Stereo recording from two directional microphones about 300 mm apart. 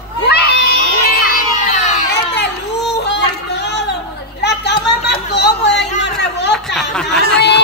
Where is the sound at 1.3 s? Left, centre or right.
Left.